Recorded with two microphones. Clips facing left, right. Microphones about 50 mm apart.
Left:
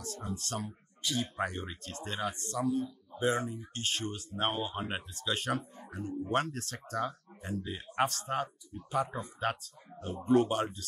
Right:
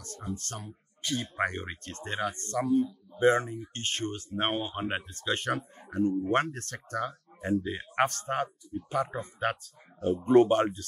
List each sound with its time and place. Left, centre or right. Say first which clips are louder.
0.3 s speech: right 1 dB; right